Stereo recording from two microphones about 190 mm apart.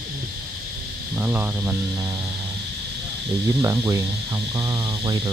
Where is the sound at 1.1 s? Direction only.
10° right (ahead or behind).